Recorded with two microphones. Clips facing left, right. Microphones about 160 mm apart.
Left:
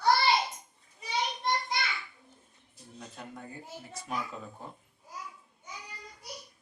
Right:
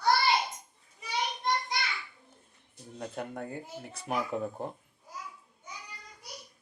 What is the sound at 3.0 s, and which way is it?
Speech, 60° right (ahead or behind).